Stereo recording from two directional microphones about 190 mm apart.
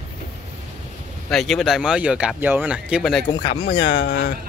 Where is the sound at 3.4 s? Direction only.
50° left (ahead or behind).